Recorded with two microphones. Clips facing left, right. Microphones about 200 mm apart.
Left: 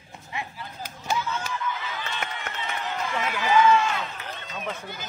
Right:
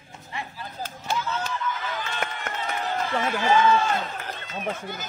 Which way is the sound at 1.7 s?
50° right (ahead or behind).